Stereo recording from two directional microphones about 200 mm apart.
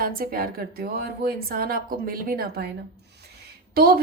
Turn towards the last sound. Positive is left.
turn(degrees=-50)  # may be behind; listen again after turning